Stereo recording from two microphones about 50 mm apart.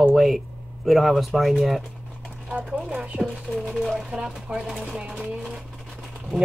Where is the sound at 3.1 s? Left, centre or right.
Right.